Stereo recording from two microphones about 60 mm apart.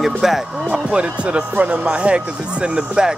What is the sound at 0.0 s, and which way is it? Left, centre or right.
Speech, centre.